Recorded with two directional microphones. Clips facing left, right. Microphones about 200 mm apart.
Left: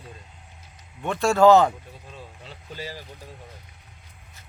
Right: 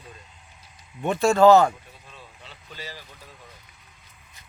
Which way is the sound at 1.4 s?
15° left (ahead or behind).